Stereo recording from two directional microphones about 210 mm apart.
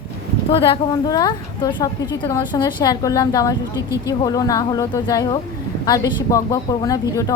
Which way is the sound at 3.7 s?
15° right (ahead or behind).